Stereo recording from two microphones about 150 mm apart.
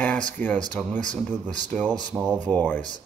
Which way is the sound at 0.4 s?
10° left (ahead or behind).